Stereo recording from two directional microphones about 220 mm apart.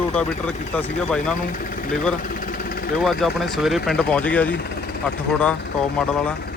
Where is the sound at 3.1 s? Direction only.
Centre (ahead or behind).